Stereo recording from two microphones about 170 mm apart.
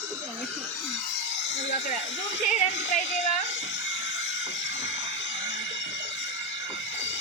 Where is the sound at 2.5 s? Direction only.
45° left (ahead or behind).